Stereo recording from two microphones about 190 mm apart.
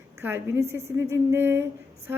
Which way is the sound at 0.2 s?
10° right (ahead or behind).